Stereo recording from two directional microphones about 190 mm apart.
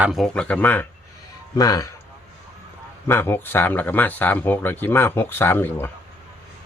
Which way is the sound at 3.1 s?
10° left (ahead or behind).